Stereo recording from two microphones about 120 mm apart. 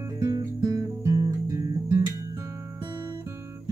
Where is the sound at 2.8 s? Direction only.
40° right (ahead or behind).